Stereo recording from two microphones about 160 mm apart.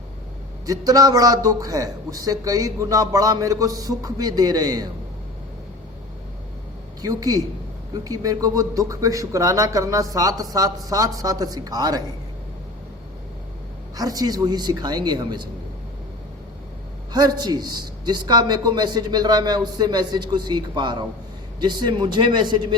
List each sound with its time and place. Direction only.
0.6 s a man's voice: 20° right (ahead or behind)
7.0 s a man's voice: 25° right (ahead or behind)
13.9 s a man's voice: 20° right (ahead or behind)
17.1 s a man's voice: 25° right (ahead or behind)